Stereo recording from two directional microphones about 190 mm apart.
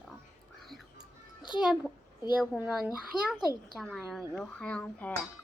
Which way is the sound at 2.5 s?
5° right (ahead or behind).